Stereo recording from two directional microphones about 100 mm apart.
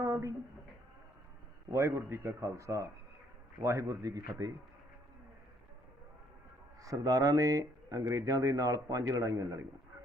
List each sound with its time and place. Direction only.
0.0 s a sound: 30° right (ahead or behind)
1.7 s speech: 30° right (ahead or behind)
6.8 s speech: 40° right (ahead or behind)